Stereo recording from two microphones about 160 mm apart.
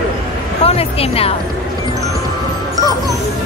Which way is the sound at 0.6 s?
40° left (ahead or behind).